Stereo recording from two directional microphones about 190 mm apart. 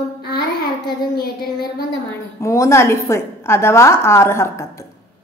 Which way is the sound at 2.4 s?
15° left (ahead or behind).